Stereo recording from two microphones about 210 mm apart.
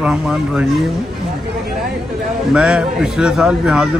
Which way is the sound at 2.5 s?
5° right (ahead or behind).